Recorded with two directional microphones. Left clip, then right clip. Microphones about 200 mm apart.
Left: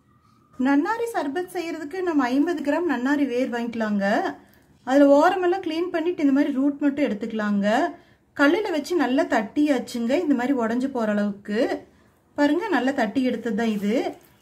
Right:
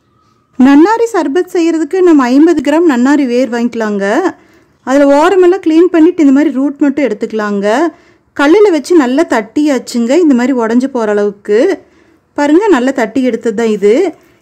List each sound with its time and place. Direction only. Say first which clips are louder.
0.7 s speech: right 15 dB; 45° right (ahead or behind)